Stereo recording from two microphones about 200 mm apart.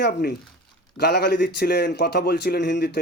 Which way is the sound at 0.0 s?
50° left (ahead or behind).